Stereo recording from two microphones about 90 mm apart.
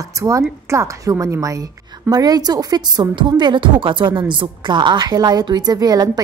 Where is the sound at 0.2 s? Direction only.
35° right (ahead or behind).